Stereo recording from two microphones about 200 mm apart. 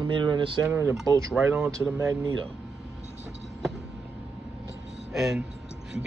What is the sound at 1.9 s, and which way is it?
Speech, 15° right (ahead or behind).